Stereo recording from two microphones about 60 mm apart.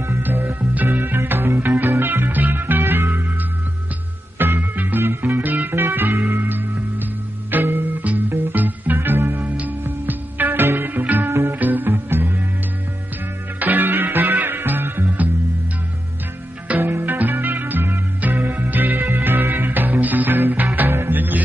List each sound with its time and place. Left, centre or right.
0.2 s music: right
4.4 s music: right
13.6 s music: right
16.6 s music: right